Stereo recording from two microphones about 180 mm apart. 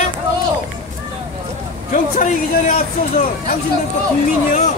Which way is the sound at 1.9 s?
45° left (ahead or behind).